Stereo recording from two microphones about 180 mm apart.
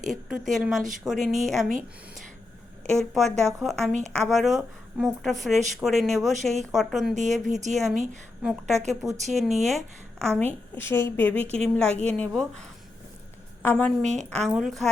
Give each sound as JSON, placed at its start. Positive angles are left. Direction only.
{"t": 0.1, "sound": "a woman's voice", "side_deg": 0}
{"t": 3.0, "sound": "a woman's voice", "side_deg": 0}
{"t": 14.0, "sound": "a woman's voice", "side_deg": -40}
{"t": 14.3, "sound": "a woman's voice", "side_deg": 5}